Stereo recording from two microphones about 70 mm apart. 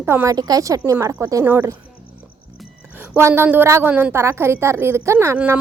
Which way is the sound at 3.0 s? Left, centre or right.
Right.